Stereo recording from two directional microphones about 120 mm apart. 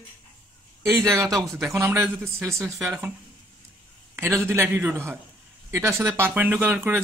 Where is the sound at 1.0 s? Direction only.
25° right (ahead or behind).